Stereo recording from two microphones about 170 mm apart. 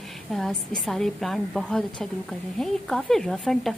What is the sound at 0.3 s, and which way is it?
A woman's voice, centre (ahead or behind).